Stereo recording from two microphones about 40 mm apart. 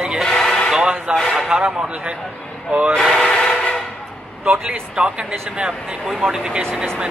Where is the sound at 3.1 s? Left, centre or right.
Centre.